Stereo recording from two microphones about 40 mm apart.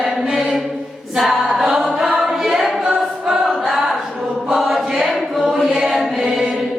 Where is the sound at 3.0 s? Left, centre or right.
Centre.